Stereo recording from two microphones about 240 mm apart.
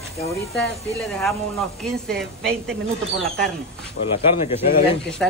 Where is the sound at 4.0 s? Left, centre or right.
Left.